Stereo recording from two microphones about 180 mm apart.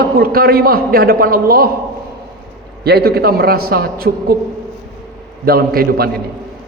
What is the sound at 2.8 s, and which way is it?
A man's voice, 60° right (ahead or behind).